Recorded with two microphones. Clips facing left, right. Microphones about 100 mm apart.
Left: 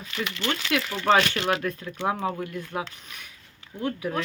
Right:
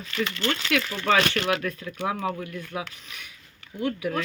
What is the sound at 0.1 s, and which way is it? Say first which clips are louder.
Speech: right 2 dB; 15° left (ahead or behind).